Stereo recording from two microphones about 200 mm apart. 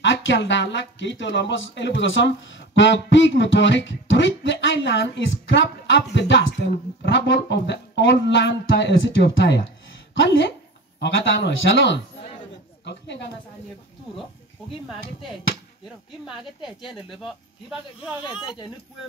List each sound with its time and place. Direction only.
0.0 s speech: 65° left (ahead or behind)
11.0 s speech: 65° left (ahead or behind)
17.1 s speech: centre (ahead or behind)